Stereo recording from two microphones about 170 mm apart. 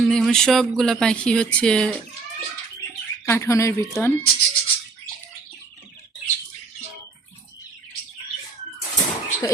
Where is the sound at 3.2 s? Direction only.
15° left (ahead or behind).